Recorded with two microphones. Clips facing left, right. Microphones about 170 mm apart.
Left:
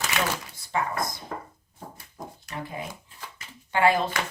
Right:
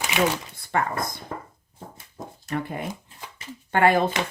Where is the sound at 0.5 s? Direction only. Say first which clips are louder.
Right 3 dB; 55° right (ahead or behind).